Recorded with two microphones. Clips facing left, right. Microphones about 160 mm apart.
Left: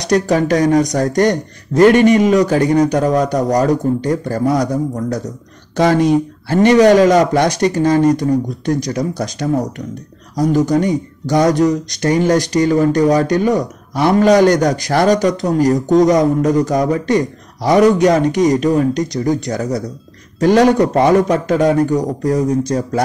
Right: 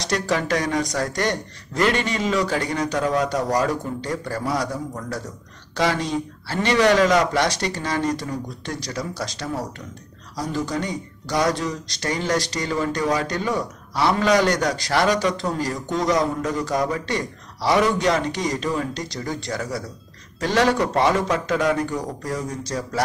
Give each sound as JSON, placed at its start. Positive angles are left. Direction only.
{"t": 0.0, "sound": "a man's voice", "side_deg": 45}